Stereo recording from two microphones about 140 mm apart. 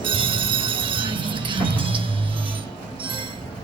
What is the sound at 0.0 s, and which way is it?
Music, 35° right (ahead or behind).